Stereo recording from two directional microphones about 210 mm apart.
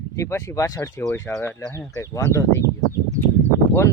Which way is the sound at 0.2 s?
15° left (ahead or behind).